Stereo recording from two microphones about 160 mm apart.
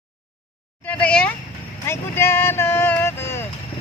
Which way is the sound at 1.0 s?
5° left (ahead or behind).